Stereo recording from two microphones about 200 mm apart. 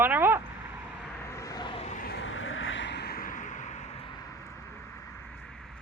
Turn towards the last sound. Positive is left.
turn(degrees=35)  # may be behind; listen again after turning